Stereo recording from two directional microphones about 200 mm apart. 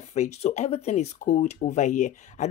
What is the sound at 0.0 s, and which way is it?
Speech, 35° left (ahead or behind).